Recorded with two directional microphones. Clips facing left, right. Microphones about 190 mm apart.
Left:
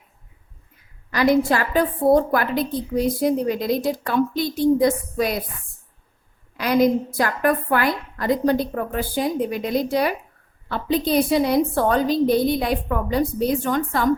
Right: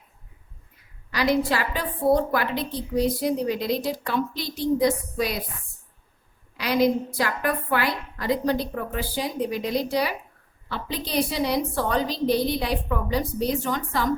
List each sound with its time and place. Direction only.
1.1 s a woman's voice: 50° left (ahead or behind)
6.6 s a woman's voice: 50° left (ahead or behind)